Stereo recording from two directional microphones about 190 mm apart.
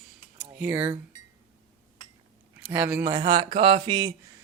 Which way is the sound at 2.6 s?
10° right (ahead or behind).